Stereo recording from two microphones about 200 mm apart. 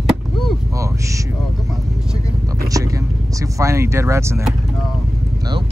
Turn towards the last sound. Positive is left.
turn(degrees=-15)  # may be behind; listen again after turning